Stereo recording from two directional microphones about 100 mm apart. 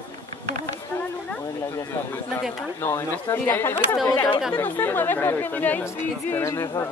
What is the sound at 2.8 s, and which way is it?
Speech, 30° left (ahead or behind).